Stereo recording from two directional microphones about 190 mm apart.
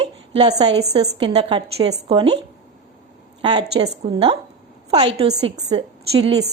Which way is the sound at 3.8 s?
35° right (ahead or behind).